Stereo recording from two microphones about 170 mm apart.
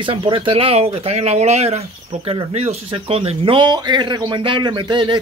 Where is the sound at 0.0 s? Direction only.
30° right (ahead or behind).